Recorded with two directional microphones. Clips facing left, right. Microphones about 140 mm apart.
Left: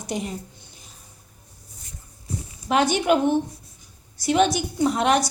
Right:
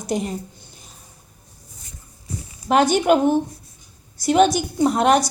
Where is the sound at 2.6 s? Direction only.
45° right (ahead or behind).